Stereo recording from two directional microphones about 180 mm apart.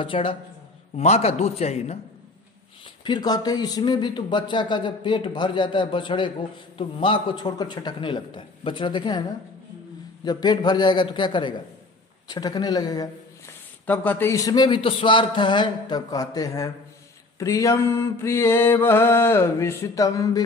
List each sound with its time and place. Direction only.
0.0 s a man's voice: 30° left (ahead or behind)
3.0 s speech: 25° left (ahead or behind)
10.2 s speech: 25° left (ahead or behind)
13.8 s speech: 10° left (ahead or behind)
17.4 s mantra: 15° left (ahead or behind)